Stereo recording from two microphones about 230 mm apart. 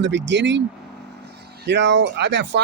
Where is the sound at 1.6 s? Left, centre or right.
Right.